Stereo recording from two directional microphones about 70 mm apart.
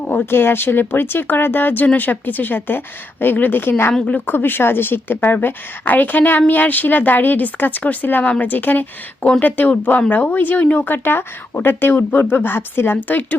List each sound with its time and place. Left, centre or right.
0.0 s speech: left